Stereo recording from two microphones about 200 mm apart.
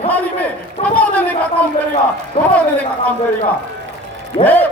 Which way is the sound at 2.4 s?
30° left (ahead or behind).